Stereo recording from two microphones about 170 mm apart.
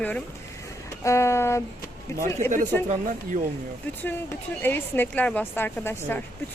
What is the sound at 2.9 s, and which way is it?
Speech, 50° right (ahead or behind).